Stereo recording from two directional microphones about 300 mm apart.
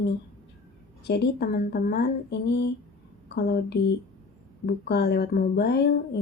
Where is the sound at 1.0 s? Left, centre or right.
Left.